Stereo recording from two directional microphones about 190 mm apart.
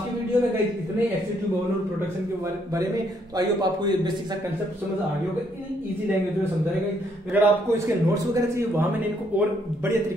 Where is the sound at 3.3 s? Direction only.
20° right (ahead or behind).